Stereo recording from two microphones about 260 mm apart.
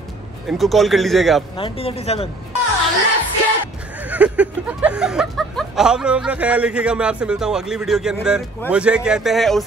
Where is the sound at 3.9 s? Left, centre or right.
Centre.